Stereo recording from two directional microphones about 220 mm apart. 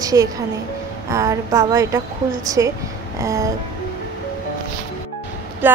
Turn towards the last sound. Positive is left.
turn(degrees=-10)  # may be behind; listen again after turning